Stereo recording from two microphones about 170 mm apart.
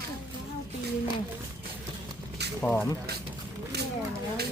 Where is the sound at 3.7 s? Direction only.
75° right (ahead or behind).